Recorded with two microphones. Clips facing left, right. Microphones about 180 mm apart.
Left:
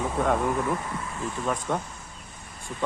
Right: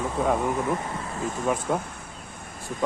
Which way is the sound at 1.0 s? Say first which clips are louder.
Right 2 dB; 35° right (ahead or behind).